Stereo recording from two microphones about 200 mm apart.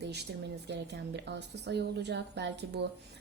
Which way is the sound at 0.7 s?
60° right (ahead or behind).